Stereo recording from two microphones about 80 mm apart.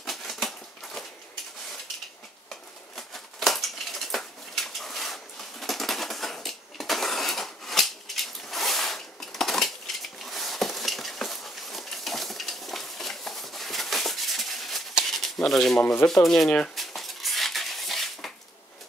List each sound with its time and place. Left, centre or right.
0.0 s a sound: centre
2.5 s a sound: centre
15.0 s pigeon: centre
15.3 s speech: centre
15.8 s speech: centre
16.1 s speech: centre
16.4 s speech: centre
16.7 s dog: centre